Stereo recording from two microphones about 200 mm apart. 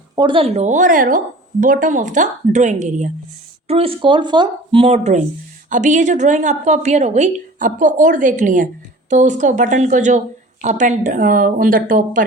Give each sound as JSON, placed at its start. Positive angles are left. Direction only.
{"t": 0.2, "sound": "a woman's voice", "side_deg": -25}